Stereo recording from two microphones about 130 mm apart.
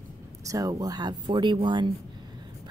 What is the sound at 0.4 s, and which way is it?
Speech, 25° right (ahead or behind).